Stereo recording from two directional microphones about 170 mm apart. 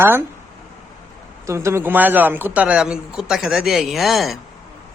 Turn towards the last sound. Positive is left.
turn(degrees=0)  # may be behind; listen again after turning